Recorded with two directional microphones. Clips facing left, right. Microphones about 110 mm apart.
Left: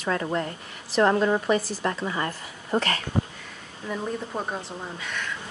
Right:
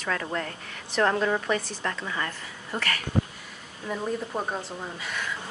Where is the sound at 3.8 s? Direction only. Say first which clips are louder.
Even; 5° right (ahead or behind).